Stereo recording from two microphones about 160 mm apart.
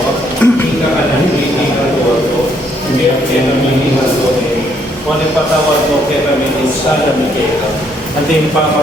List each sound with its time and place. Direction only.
0.4 s a woman's voice: 10° left (ahead or behind)